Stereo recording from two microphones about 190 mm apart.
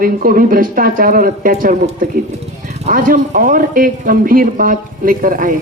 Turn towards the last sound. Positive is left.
turn(degrees=-45)  # may be behind; listen again after turning